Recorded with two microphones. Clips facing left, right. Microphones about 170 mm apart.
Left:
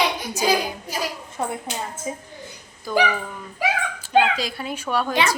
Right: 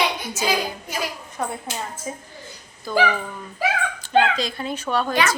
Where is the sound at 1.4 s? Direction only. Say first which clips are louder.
Left 1 dB; 25° left (ahead or behind).